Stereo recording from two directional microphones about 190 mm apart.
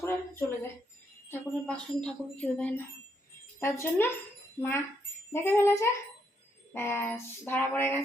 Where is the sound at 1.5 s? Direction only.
5° left (ahead or behind).